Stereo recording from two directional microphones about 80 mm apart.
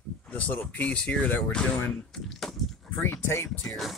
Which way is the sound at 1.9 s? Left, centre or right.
Centre.